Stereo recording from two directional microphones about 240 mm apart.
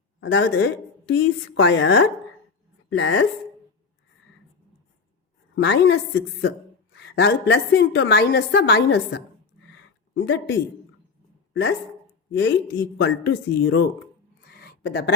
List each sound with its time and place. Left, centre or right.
0.2 s a woman's voice: left
5.5 s a woman's voice: left
12.3 s a woman's voice: left
14.4 s a sound: left